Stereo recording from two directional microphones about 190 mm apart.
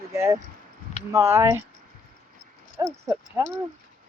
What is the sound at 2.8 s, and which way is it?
Speech, 20° right (ahead or behind).